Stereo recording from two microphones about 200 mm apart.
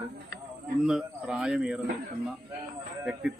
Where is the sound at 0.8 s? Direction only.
5° right (ahead or behind).